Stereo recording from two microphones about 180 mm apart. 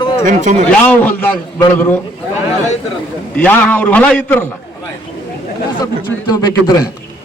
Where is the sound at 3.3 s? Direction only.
5° left (ahead or behind).